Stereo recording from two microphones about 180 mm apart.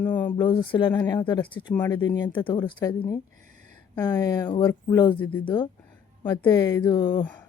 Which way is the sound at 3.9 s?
15° left (ahead or behind).